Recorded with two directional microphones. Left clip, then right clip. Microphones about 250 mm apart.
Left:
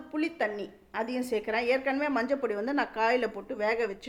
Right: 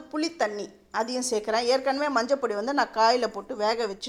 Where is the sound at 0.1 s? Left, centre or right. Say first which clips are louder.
Right 3 dB; centre.